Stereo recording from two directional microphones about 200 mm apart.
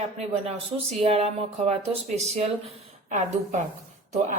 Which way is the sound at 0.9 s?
30° right (ahead or behind).